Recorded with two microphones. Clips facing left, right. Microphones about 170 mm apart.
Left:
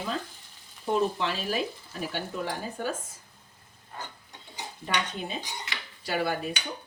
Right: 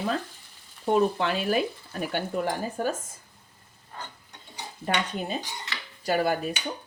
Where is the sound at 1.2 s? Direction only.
55° right (ahead or behind).